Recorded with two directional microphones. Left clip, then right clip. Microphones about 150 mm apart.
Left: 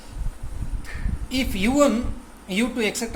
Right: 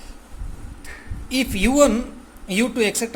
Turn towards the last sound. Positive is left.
turn(degrees=-40)  # may be behind; listen again after turning